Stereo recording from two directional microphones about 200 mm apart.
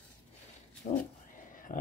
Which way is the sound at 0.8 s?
40° left (ahead or behind).